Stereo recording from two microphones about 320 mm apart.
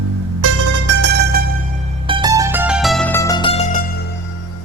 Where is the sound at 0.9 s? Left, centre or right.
Right.